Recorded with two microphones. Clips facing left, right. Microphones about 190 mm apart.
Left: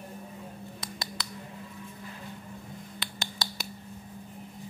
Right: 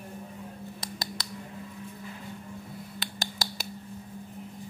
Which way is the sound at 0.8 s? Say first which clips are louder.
Right 1 dB; 40° right (ahead or behind).